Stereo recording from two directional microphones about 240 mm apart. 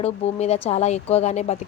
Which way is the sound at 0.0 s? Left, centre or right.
Left.